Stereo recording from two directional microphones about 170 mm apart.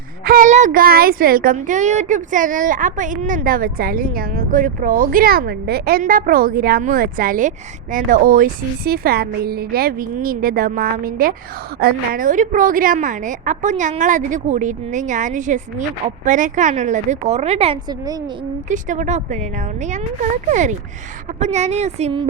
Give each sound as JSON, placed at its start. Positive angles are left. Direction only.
{"t": 0.3, "sound": "a child's voice", "side_deg": -50}
{"t": 1.5, "sound": "a woman's voice", "side_deg": -45}
{"t": 17.8, "sound": "a child's voice", "side_deg": -20}
{"t": 18.7, "sound": "a woman's voice", "side_deg": -45}